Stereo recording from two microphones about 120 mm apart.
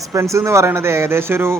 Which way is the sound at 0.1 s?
25° right (ahead or behind).